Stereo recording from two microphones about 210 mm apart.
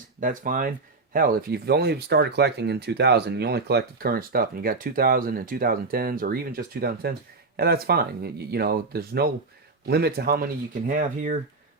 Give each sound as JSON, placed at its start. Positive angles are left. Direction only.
{"t": 0.2, "sound": "speech", "side_deg": -40}